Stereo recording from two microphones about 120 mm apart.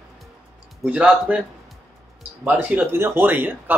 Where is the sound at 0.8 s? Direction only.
10° right (ahead or behind).